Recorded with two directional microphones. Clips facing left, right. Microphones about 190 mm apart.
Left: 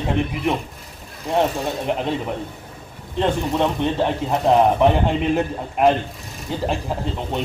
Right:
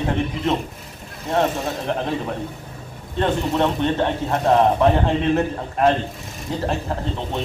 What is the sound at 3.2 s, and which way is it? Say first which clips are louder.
A man's voice: even; 15° left (ahead or behind).